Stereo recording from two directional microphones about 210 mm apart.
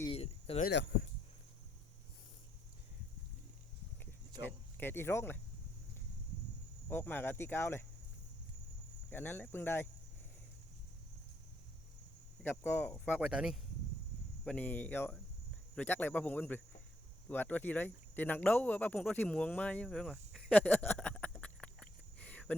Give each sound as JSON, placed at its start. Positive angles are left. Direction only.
{"t": 0.1, "sound": "a sound", "side_deg": 30}
{"t": 0.7, "sound": "speech", "side_deg": 55}
{"t": 4.4, "sound": "speech", "side_deg": 10}
{"t": 6.9, "sound": "speech", "side_deg": 10}
{"t": 9.0, "sound": "speech", "side_deg": 10}
{"t": 12.4, "sound": "speech", "side_deg": 10}